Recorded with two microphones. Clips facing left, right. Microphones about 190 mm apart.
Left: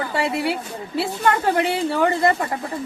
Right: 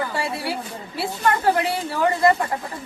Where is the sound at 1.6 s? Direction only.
25° left (ahead or behind).